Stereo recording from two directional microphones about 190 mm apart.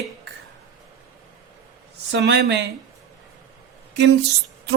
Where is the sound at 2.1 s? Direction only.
65° right (ahead or behind).